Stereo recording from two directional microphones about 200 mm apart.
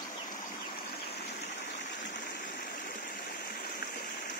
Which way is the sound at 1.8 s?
60° left (ahead or behind).